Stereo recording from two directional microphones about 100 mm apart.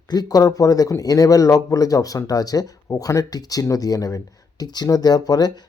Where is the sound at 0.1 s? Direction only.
40° left (ahead or behind).